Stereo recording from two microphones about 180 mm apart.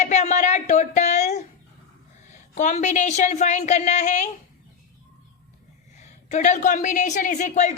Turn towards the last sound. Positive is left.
turn(degrees=40)  # may be behind; listen again after turning